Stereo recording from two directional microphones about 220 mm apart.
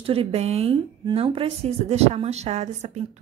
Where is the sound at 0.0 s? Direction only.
25° right (ahead or behind).